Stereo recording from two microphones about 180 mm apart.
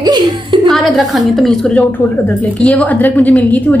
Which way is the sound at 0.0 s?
25° right (ahead or behind).